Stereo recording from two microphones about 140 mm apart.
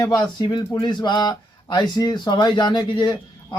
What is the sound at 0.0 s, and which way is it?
Speech, 30° left (ahead or behind).